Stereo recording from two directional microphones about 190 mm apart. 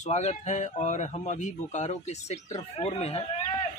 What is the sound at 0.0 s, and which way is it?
Speech, 35° left (ahead or behind).